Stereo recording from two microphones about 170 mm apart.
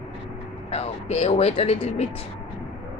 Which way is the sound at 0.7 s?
40° left (ahead or behind).